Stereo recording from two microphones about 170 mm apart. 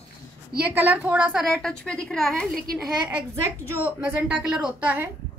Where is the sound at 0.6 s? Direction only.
10° right (ahead or behind).